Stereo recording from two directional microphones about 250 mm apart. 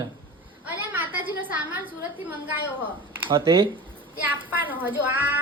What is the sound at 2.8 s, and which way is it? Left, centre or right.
Speech, centre.